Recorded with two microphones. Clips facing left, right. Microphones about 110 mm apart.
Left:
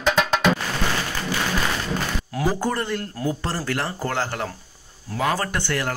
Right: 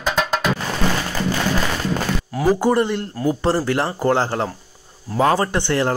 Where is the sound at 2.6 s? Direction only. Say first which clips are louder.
Right 7 dB; 20° right (ahead or behind).